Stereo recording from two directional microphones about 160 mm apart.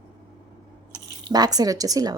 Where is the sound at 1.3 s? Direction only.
25° right (ahead or behind).